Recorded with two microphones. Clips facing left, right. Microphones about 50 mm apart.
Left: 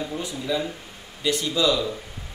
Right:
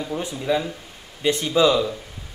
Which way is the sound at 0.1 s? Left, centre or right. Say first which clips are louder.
Right 4 dB; right.